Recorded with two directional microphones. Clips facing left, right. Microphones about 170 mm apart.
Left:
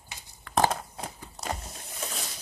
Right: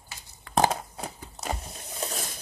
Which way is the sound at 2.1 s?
50° right (ahead or behind).